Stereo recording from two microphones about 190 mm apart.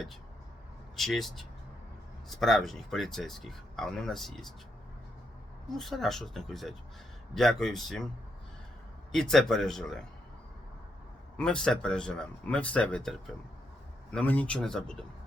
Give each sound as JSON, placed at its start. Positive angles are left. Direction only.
{"t": 0.9, "sound": "speech", "side_deg": 0}
{"t": 5.7, "sound": "speech", "side_deg": 0}
{"t": 9.1, "sound": "speech", "side_deg": 5}
{"t": 11.3, "sound": "speech", "side_deg": 5}